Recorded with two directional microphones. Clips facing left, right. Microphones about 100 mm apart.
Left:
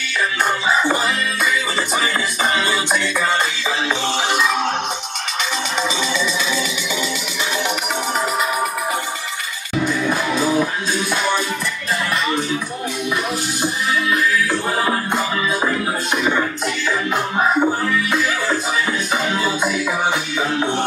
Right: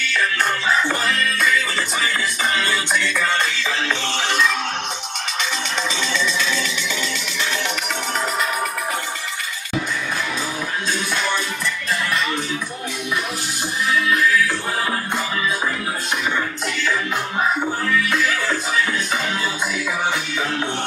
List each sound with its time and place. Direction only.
0.7 s music: 10° left (ahead or behind)
2.5 s music: 10° left (ahead or behind)
4.3 s music: 10° left (ahead or behind)
10.0 s music: 30° left (ahead or behind)
14.1 s music: 15° left (ahead or behind)
17.4 s music: 20° left (ahead or behind)